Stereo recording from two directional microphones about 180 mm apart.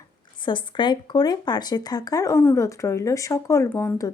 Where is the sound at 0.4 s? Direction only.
25° left (ahead or behind).